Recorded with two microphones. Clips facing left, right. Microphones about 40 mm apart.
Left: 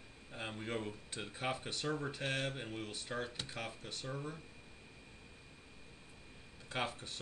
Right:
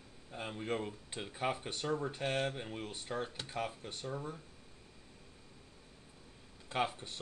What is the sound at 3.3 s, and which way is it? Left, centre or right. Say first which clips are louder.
Speech: right 4 dB; centre.